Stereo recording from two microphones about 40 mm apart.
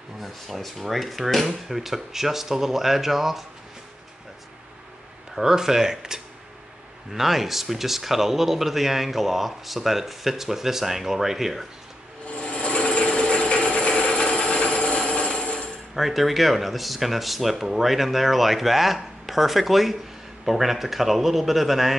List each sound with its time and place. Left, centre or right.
0.2 s speech: centre
1.7 s speech: centre
5.3 s speech: centre
12.4 s tools: left
15.9 s speech: centre